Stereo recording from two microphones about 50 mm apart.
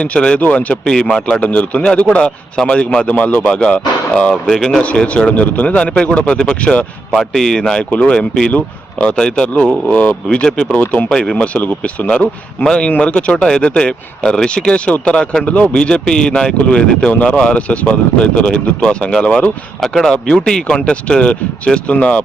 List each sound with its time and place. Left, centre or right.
0.0 s a man's voice: left
4.4 s speech: centre
4.8 s a man's voice: left
7.2 s speech: centre
7.9 s a man's voice: left
9.9 s speech: left
10.3 s a man's voice: centre
13.6 s a man's voice: left
19.8 s speech: centre; by 22.2 s left